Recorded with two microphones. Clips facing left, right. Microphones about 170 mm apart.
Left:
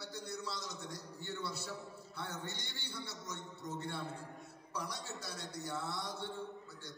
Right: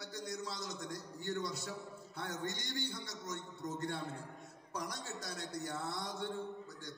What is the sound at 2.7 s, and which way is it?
A man's voice, 45° right (ahead or behind).